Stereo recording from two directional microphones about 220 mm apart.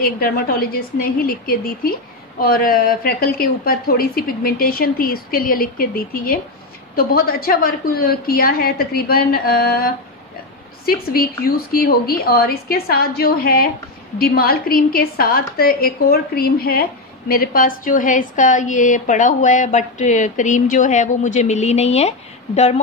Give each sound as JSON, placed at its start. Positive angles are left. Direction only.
{"t": 0.0, "sound": "a woman's voice", "side_deg": 45}